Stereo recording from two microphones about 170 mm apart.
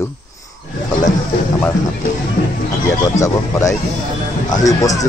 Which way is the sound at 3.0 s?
20° left (ahead or behind).